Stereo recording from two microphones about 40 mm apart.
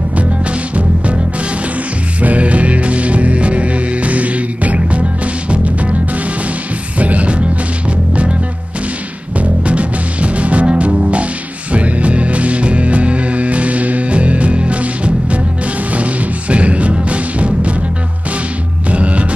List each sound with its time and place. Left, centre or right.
0.1 s music: right
2.2 s music: right
7.0 s music: right
9.4 s music: right
18.9 s music: right